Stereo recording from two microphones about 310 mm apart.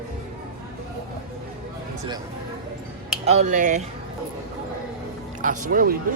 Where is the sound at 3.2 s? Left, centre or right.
Right.